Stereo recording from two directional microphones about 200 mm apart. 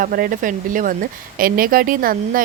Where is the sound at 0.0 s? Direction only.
45° right (ahead or behind).